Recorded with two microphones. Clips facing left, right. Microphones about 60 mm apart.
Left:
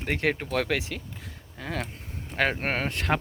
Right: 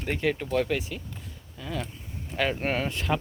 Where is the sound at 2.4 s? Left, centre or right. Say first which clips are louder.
Left 1 dB; left.